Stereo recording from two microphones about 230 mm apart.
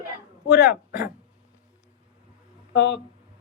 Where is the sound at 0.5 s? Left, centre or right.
Left.